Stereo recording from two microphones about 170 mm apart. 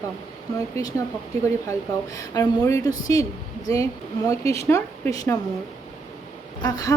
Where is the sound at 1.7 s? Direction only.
20° left (ahead or behind).